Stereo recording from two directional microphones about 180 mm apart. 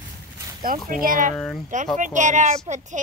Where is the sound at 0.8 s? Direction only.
50° right (ahead or behind).